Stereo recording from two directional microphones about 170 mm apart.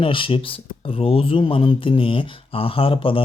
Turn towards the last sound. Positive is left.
turn(degrees=30)  # may be behind; listen again after turning